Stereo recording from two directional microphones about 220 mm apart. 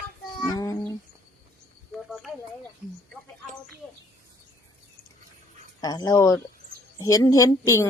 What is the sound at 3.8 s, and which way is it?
Bird, 5° left (ahead or behind).